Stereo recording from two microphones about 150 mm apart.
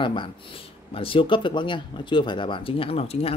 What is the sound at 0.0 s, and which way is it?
Speech, 35° left (ahead or behind).